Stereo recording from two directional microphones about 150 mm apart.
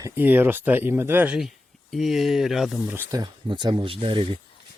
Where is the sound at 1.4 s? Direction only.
Centre (ahead or behind).